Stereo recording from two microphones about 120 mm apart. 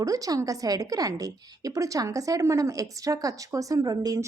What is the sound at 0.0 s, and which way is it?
A woman's voice, 30° right (ahead or behind).